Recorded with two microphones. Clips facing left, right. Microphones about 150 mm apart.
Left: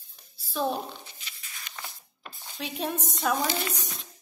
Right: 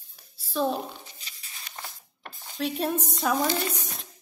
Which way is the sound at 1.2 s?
35° right (ahead or behind).